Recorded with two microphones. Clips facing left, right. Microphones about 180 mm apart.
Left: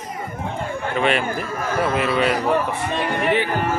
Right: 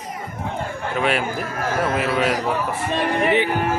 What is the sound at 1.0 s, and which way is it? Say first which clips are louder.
Speech: left 1 dB; 5° right (ahead or behind).